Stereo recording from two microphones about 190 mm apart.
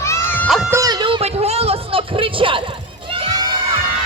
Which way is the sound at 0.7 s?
20° right (ahead or behind).